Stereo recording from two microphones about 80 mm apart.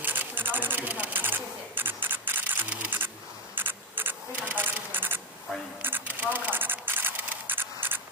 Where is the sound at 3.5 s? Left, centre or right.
Right.